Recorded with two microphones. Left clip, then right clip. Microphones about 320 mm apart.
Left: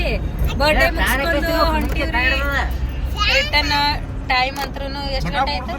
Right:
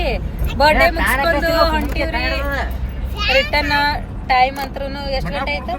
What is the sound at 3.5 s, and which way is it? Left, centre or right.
Speech, centre.